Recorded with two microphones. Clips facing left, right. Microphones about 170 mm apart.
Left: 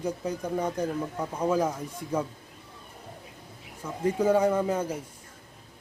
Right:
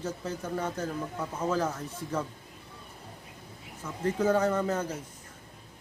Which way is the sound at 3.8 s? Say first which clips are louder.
Left 2 dB; 10° left (ahead or behind).